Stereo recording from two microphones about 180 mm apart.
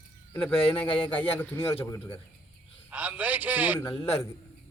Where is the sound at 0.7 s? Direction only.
30° left (ahead or behind).